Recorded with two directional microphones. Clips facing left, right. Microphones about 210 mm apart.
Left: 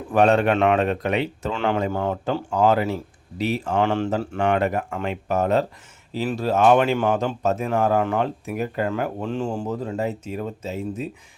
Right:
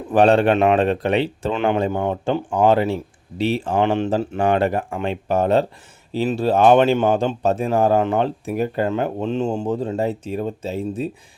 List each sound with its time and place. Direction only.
0.1 s speech: 30° right (ahead or behind)
0.5 s speech: 20° right (ahead or behind)
0.8 s speech: 30° right (ahead or behind)
1.5 s speech: 20° right (ahead or behind)
2.5 s speech: 30° right (ahead or behind)
4.4 s speech: 30° right (ahead or behind)